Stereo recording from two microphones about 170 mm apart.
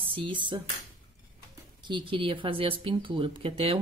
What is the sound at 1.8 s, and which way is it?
Speech, 30° right (ahead or behind).